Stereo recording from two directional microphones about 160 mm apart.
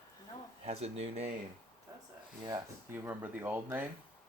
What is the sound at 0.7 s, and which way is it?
Speech, 40° right (ahead or behind).